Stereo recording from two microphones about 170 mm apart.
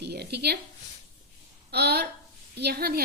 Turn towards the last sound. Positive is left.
turn(degrees=-65)  # may be behind; listen again after turning